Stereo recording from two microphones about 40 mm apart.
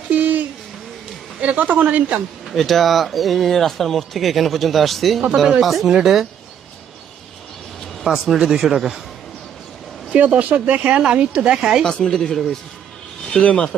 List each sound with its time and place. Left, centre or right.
0.1 s a sound: right
1.4 s speech: right
2.5 s speech: centre
8.0 s speech: centre
10.2 s speech: right
11.0 s a woman's voice: right
12.1 s speech: centre
13.3 s speech: left